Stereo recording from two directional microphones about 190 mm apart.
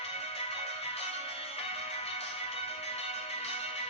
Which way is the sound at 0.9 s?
30° left (ahead or behind).